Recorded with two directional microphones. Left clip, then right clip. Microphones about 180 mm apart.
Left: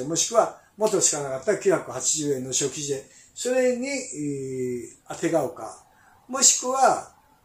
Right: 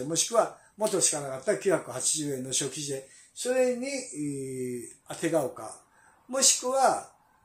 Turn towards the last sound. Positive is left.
turn(degrees=-20)  # may be behind; listen again after turning